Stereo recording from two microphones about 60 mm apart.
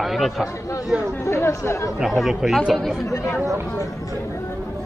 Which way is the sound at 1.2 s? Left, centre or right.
Left.